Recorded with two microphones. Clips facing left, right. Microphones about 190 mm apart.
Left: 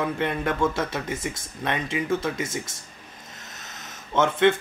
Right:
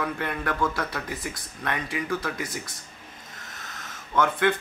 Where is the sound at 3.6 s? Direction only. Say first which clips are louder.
Even; 20° left (ahead or behind).